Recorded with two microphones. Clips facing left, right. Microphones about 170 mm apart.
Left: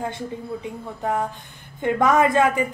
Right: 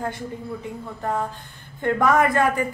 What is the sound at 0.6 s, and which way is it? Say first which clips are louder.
A woman's voice: left 1 dB; 15° left (ahead or behind).